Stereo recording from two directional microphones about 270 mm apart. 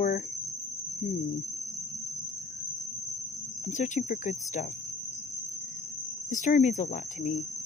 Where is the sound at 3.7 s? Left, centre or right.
Left.